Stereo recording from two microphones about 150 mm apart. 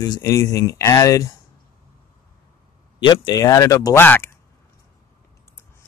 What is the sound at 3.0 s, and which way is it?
Speech, 30° left (ahead or behind).